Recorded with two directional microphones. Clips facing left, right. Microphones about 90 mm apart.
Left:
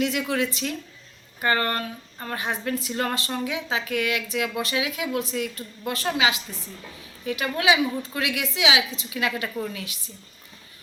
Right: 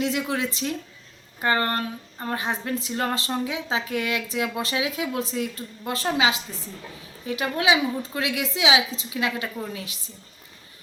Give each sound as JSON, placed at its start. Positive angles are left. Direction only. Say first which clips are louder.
{"t": 0.0, "sound": "speech", "louder": "left 1 dB", "side_deg": -25}
{"t": 2.9, "sound": "speech", "louder": "right 1 dB", "side_deg": -10}
{"t": 3.2, "sound": "speech", "louder": "right 1 dB", "side_deg": -25}